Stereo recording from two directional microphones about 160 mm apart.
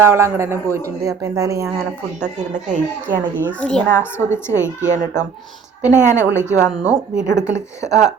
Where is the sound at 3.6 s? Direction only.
5° left (ahead or behind).